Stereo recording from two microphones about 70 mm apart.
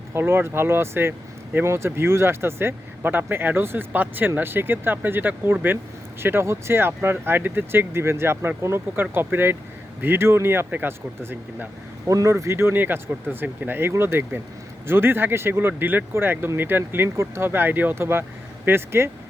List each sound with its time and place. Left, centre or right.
0.1 s speech: right
12.0 s speech: right
12.7 s speech: right